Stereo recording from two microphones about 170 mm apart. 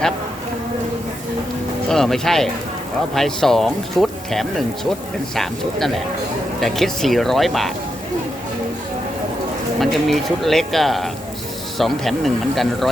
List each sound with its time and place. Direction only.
1.9 s speech: centre (ahead or behind)
9.8 s speech: centre (ahead or behind)